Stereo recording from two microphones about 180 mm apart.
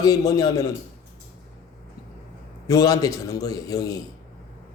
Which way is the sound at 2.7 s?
20° left (ahead or behind).